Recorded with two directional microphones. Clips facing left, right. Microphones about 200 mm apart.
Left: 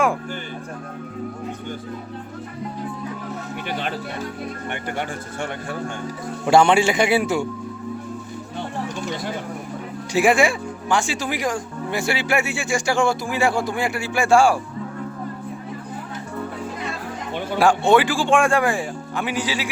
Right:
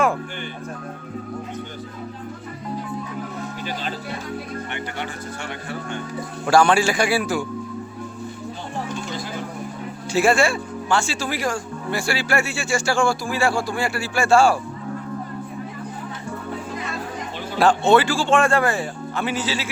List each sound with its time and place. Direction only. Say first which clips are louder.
3.7 s music: left 4 dB; 60° left (ahead or behind)
6.4 s speech: left 1 dB; 20° left (ahead or behind)
10.1 s speech: left 1 dB; 15° left (ahead or behind)
17.6 s speech: even; 10° left (ahead or behind)